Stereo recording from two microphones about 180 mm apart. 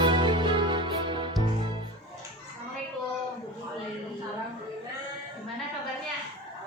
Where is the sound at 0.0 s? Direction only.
25° right (ahead or behind).